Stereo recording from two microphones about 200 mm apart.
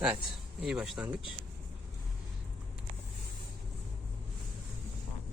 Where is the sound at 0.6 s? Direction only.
Centre (ahead or behind).